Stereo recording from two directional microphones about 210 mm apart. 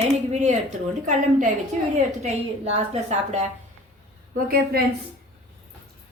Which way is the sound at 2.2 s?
30° right (ahead or behind).